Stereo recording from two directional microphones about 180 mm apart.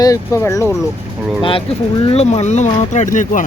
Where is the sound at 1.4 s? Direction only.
30° left (ahead or behind).